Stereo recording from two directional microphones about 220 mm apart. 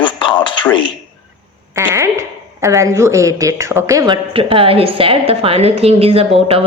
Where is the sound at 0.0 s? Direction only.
20° left (ahead or behind).